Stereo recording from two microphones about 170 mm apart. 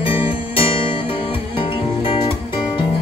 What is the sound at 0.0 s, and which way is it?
Music, 35° left (ahead or behind).